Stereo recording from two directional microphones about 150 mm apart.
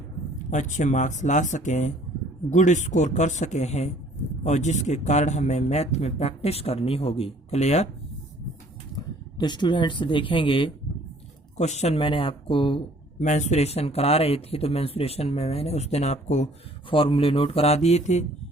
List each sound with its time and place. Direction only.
0.5 s speech: 55° left (ahead or behind)
9.4 s speech: 30° left (ahead or behind)
11.5 s speech: 50° left (ahead or behind)
13.1 s speech: 55° left (ahead or behind)
16.9 s speech: 35° left (ahead or behind)